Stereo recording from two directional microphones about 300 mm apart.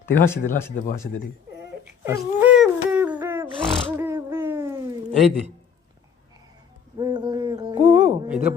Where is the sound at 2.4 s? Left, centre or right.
Centre.